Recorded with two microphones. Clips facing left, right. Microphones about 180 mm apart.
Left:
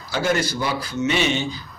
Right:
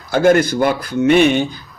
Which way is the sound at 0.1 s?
55° right (ahead or behind).